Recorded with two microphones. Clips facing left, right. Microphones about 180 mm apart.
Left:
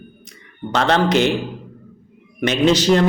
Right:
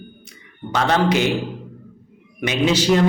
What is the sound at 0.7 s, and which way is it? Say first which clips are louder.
Speech: left 2 dB; 10° right (ahead or behind).